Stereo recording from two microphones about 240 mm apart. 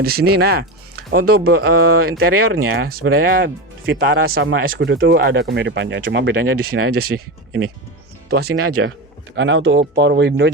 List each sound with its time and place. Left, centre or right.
0.0 s speech: right
8.3 s speech: right
8.5 s speech: right
9.3 s speech: right